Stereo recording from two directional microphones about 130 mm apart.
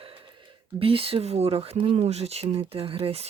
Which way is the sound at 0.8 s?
45° right (ahead or behind).